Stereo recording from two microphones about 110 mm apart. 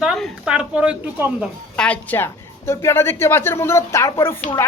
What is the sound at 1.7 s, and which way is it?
A woman's voice, 10° left (ahead or behind).